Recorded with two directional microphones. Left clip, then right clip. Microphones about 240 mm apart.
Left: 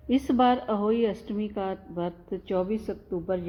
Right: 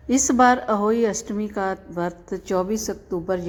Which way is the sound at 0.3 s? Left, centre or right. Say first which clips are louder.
Right 7 dB; right.